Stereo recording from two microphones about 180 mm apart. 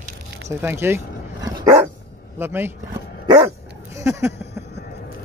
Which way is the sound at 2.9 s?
20° right (ahead or behind).